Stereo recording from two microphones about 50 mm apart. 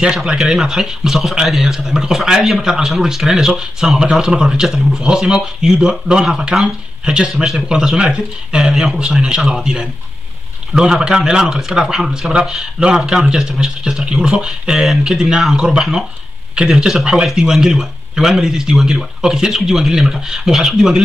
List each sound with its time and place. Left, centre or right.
0.0 s speech: centre